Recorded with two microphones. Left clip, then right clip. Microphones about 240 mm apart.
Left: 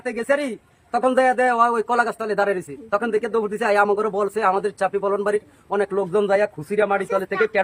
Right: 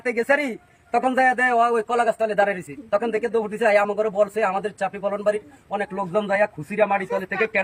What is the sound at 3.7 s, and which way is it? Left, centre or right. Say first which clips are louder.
A man's voice: left 1 dB; centre.